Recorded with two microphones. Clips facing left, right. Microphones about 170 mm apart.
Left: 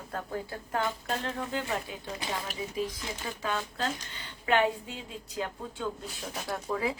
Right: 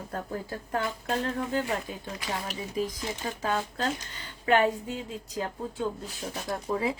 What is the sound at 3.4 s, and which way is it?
Speech, 40° right (ahead or behind).